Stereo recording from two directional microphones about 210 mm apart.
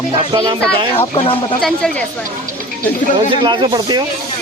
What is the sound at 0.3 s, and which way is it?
Speech, 20° right (ahead or behind).